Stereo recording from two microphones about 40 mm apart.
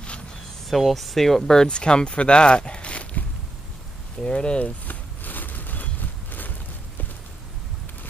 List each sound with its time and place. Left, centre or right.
0.7 s speech: centre; by 3.1 s left
4.3 s speech: left
4.8 s a sound: left